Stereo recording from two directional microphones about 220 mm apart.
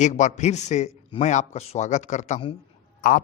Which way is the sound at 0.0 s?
35° left (ahead or behind).